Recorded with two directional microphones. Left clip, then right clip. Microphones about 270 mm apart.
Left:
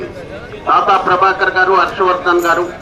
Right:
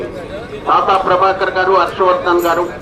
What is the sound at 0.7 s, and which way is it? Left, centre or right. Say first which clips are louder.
A man's voice: left 1 dB; centre.